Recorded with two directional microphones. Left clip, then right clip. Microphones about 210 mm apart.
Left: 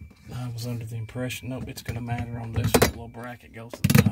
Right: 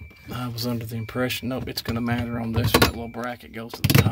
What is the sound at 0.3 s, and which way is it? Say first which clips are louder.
Speech: right 8 dB; 35° right (ahead or behind).